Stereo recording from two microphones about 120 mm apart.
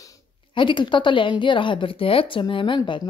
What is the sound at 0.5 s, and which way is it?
Speech, 40° left (ahead or behind).